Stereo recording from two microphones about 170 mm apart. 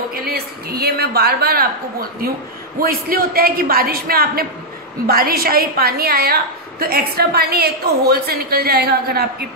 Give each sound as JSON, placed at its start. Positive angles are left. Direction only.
{"t": 0.1, "sound": "a woman's voice", "side_deg": -65}